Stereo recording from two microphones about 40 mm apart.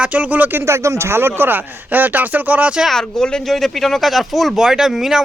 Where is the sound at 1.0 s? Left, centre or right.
Right.